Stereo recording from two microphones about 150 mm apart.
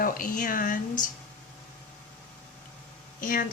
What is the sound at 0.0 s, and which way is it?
Speech, 65° left (ahead or behind).